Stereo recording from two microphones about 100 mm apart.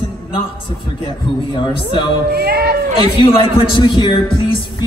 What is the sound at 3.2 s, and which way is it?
A woman's voice, 55° left (ahead or behind).